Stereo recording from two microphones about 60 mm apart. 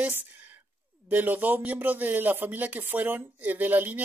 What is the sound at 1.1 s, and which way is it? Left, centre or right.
Speech, right.